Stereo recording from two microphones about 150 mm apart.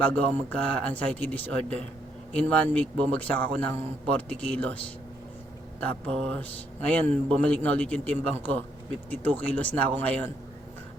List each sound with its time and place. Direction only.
0.1 s a man's voice: 10° left (ahead or behind)
5.8 s a man's voice: 5° left (ahead or behind)
7.1 s a man's voice: 50° right (ahead or behind)
7.4 s a man's voice: 10° left (ahead or behind)